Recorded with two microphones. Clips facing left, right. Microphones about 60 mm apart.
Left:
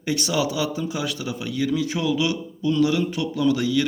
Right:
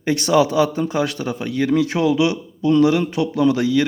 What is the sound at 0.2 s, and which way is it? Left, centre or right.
A man's voice, right.